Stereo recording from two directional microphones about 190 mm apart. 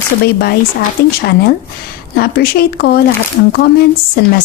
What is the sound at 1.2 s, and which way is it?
A woman's voice, 55° left (ahead or behind).